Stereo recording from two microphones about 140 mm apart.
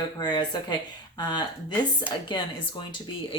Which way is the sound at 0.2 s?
30° left (ahead or behind).